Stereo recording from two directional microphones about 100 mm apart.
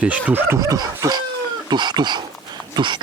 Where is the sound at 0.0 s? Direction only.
15° right (ahead or behind).